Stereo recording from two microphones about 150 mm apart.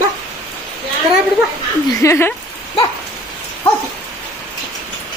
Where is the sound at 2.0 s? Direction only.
15° left (ahead or behind).